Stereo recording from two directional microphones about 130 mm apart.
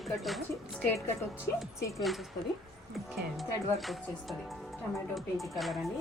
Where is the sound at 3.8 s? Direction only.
Centre (ahead or behind).